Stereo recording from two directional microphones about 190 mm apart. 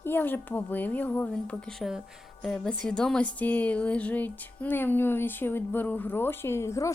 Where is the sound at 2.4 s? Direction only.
5° left (ahead or behind).